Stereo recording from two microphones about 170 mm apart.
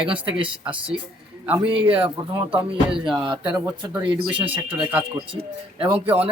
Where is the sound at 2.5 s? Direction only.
5° right (ahead or behind).